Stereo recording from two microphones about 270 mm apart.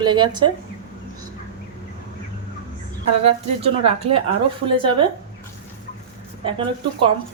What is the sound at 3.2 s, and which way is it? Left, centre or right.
A woman's voice, right.